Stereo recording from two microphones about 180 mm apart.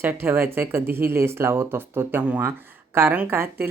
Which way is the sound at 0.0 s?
10° right (ahead or behind).